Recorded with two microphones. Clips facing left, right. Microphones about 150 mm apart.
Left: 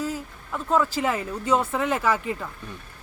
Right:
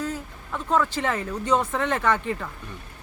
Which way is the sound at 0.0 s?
10° left (ahead or behind).